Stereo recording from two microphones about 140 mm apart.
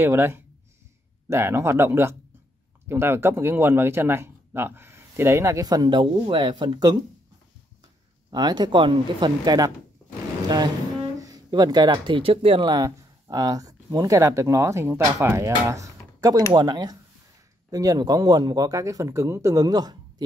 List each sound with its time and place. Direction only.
0.0 s speech: 15° right (ahead or behind); by 7.0 s 30° right (ahead or behind)
8.3 s speech: 30° right (ahead or behind)
11.1 s speech: 25° right (ahead or behind)